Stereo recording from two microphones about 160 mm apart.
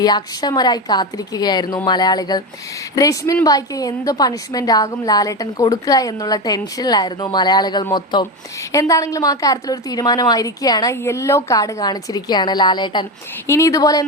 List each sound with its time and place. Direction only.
0.0 s a woman's voice: 25° left (ahead or behind)